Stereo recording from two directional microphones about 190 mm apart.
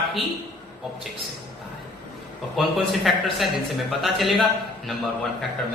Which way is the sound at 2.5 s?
Centre (ahead or behind).